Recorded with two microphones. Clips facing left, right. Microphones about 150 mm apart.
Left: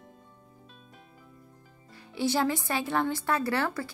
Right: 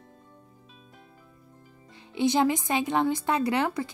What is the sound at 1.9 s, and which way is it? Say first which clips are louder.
Speech: right 4 dB; 20° right (ahead or behind).